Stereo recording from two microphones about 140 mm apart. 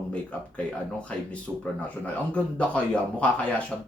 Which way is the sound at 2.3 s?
10° left (ahead or behind).